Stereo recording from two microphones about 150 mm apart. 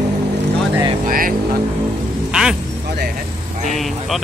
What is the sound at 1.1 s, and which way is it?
Speech, 70° right (ahead or behind).